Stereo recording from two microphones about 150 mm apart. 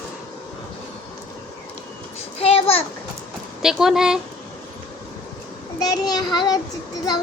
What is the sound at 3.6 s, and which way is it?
Speech, 5° right (ahead or behind).